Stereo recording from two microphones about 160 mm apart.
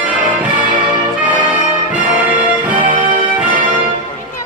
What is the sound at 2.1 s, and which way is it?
Music, 10° right (ahead or behind).